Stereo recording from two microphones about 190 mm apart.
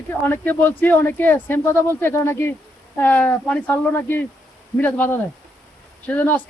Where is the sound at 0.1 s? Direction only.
10° left (ahead or behind).